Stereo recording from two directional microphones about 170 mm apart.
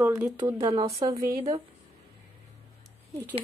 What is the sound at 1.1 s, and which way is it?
Speech, 20° right (ahead or behind).